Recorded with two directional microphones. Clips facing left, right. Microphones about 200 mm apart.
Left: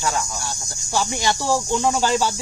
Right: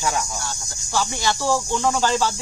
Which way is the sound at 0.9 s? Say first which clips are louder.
Left 1 dB; 15° left (ahead or behind).